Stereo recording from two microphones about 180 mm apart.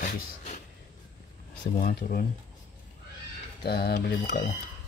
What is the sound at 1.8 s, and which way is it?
Speech, 50° left (ahead or behind).